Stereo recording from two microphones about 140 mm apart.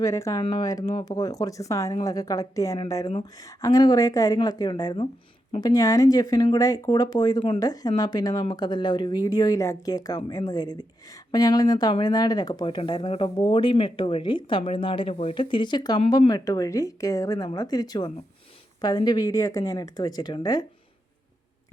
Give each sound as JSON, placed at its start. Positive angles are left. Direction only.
{"t": 0.0, "sound": "speech", "side_deg": 25}